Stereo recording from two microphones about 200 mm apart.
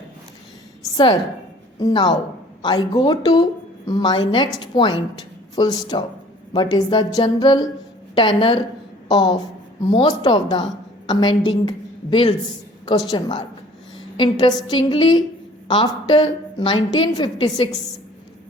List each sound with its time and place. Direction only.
0.9 s a sound: 20° left (ahead or behind)
1.8 s a woman's voice: 20° left (ahead or behind)
12.8 s a woman's voice: 20° left (ahead or behind)